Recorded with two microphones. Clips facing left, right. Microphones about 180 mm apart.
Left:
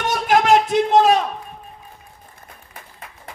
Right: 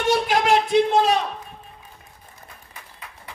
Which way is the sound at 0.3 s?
50° left (ahead or behind).